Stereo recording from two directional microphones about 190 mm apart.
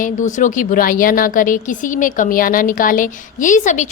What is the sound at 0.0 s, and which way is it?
A woman's voice, 40° left (ahead or behind).